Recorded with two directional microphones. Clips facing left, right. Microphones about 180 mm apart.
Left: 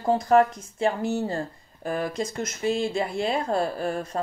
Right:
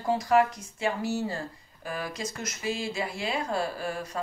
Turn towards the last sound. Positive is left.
turn(degrees=50)  # may be behind; listen again after turning